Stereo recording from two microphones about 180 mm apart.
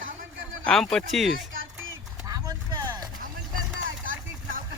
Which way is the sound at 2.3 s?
20° right (ahead or behind).